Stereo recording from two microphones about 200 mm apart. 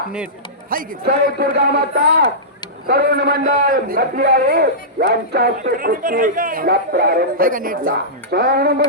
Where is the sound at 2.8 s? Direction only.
50° right (ahead or behind).